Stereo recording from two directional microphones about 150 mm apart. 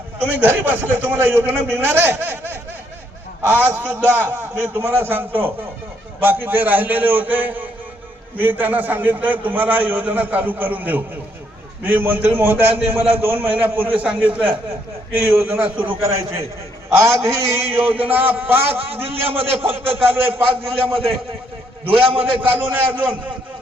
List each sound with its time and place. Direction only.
0.2 s a man's voice: 10° right (ahead or behind)
19.0 s a man's voice: 40° right (ahead or behind)
22.5 s a man's voice: 15° right (ahead or behind)